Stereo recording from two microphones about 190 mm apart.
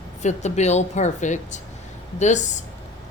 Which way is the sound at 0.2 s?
40° left (ahead or behind).